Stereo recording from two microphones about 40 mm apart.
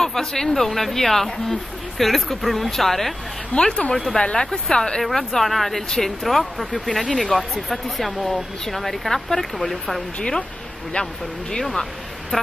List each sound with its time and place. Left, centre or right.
0.0 s speech: centre
3.5 s speech: left
5.0 s speech: centre
11.6 s a sound: centre